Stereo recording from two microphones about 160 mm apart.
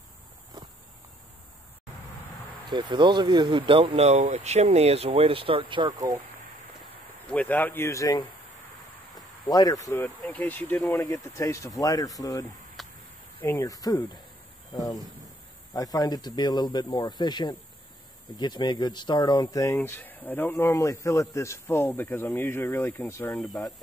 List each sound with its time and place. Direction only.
2.7 s speech: 30° right (ahead or behind)
7.2 s speech: 10° left (ahead or behind)
9.1 s a sound: 25° left (ahead or behind)
10.0 s speech: 10° left (ahead or behind)
12.8 s a sound: centre (ahead or behind)
13.4 s speech: 15° left (ahead or behind)